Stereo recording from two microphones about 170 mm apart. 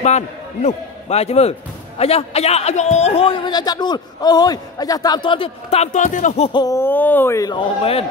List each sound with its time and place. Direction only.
0.0 s a man's voice: 40° left (ahead or behind)
6.5 s speech: 20° left (ahead or behind)